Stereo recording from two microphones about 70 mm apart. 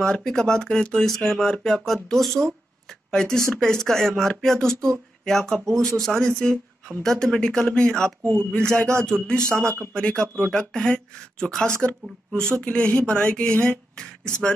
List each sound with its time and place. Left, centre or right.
0.0 s speech: centre
8.2 s speech: right
8.5 s speech: centre